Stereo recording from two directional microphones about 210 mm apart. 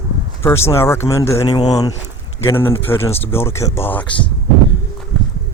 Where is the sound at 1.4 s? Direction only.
25° left (ahead or behind); by 4.1 s 10° left (ahead or behind).